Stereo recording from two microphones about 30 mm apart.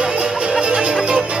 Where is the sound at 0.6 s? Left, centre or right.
Right.